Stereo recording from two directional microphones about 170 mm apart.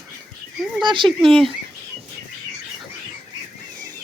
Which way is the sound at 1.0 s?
Centre (ahead or behind).